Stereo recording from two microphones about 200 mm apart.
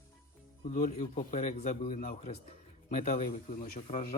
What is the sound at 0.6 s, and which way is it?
A man's voice, 40° left (ahead or behind).